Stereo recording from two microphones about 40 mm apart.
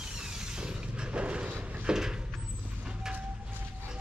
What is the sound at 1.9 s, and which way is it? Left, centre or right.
Vehicle, centre.